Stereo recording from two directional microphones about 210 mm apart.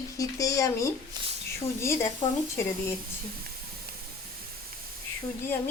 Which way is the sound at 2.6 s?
10° left (ahead or behind).